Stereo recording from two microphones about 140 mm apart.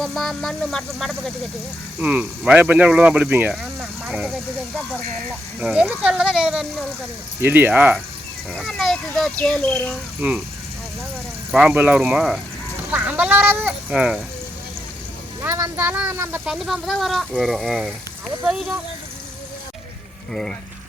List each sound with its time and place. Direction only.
0.0 s speech: centre (ahead or behind)
2.0 s speech: 10° right (ahead or behind)
3.5 s vehicle: centre (ahead or behind)
4.1 s speech: 5° right (ahead or behind)
5.5 s speech: 10° right (ahead or behind)
8.5 s speech: centre (ahead or behind)
10.2 s speech: 10° right (ahead or behind)
11.5 s speech: 10° right (ahead or behind)
15.4 s speech: 20° right (ahead or behind)
16.5 s speech: centre (ahead or behind)
20.3 s speech: 5° left (ahead or behind)